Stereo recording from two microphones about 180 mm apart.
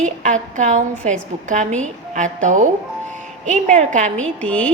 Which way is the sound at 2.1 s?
45° right (ahead or behind).